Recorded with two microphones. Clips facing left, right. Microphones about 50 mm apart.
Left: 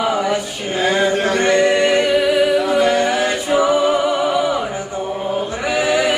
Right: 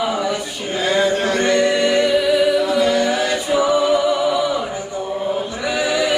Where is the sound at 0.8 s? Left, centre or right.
Left.